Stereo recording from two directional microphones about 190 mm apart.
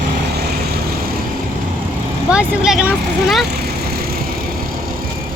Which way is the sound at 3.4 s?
55° right (ahead or behind).